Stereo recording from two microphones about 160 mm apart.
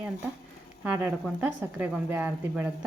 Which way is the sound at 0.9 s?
10° right (ahead or behind).